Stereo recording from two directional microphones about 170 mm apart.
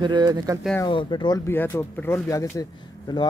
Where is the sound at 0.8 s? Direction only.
25° left (ahead or behind).